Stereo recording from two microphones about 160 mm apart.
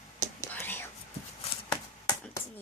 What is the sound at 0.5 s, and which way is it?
Whispering, 10° left (ahead or behind).